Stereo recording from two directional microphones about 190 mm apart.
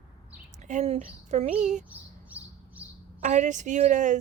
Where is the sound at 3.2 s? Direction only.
40° right (ahead or behind).